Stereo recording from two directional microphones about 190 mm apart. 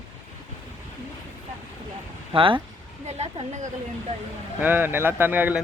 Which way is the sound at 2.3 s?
25° right (ahead or behind).